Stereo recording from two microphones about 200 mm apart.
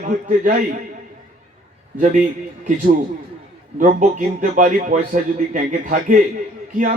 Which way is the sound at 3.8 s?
40° right (ahead or behind).